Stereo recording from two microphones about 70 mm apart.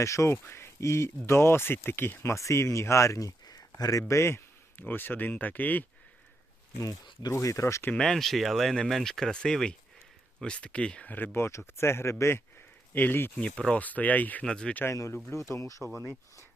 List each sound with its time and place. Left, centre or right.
0.0 s speech: left
2.3 s speech: left
4.1 s speech: left
6.7 s speech: left
7.3 s speech: left
7.9 s speech: centre; by 13.4 s left
13.4 s speech: centre
14.4 s speech: centre
14.8 s speech: left